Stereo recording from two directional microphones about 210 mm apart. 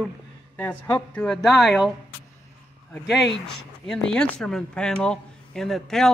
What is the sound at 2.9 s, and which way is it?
Speech, centre (ahead or behind).